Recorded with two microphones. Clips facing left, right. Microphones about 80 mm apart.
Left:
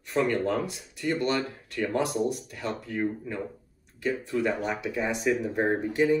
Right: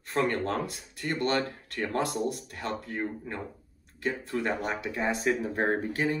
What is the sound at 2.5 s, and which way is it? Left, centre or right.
Speech, right.